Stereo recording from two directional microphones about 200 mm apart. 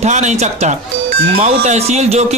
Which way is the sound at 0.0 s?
35° right (ahead or behind).